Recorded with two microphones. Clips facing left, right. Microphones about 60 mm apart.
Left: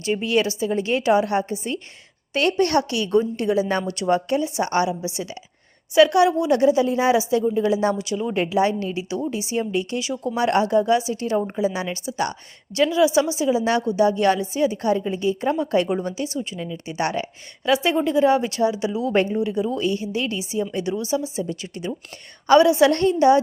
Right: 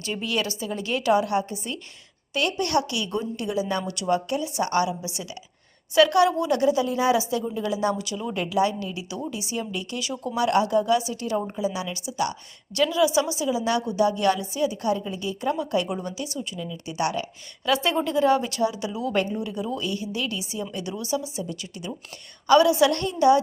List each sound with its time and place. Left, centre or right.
0.0 s a woman's voice: left
12.7 s a woman's voice: left
17.7 s a woman's voice: centre